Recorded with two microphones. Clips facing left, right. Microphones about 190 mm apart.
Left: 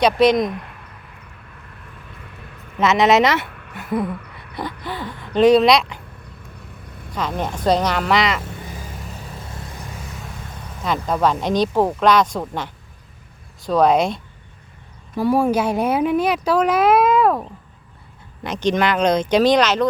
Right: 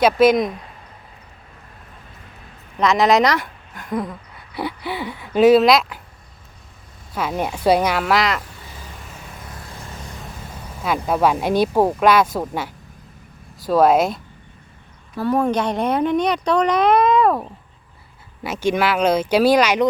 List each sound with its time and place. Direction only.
0.0 s speech: 5° right (ahead or behind)
2.7 s speech: 5° left (ahead or behind)
3.4 s a sound: 65° left (ahead or behind)
3.8 s a sound: 5° left (ahead or behind)
4.5 s speech: 10° right (ahead or behind)
7.1 s speech: 10° right (ahead or behind)
10.8 s speech: 10° right (ahead or behind)
15.1 s speech: 10° left (ahead or behind)
18.4 s speech: 5° right (ahead or behind)